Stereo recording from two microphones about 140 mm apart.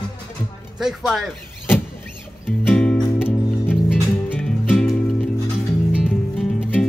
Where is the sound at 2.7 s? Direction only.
10° left (ahead or behind).